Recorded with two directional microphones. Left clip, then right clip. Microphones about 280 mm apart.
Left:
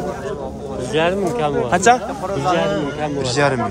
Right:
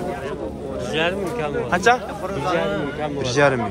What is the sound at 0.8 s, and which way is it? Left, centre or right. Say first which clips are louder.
Speech: left 5 dB; left.